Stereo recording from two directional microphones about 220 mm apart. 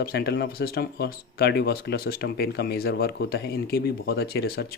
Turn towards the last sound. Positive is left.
turn(degrees=45)  # may be behind; listen again after turning